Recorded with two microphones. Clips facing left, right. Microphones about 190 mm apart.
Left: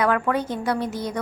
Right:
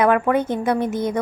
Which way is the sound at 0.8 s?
55° right (ahead or behind).